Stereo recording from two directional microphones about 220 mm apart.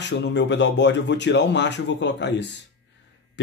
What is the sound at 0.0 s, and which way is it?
A man's voice, 55° left (ahead or behind).